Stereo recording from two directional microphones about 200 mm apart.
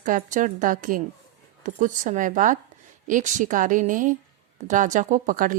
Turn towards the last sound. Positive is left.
turn(degrees=-40)  # may be behind; listen again after turning